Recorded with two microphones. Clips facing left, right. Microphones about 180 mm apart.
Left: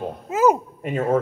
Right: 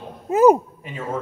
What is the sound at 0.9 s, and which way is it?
Speech, 60° left (ahead or behind).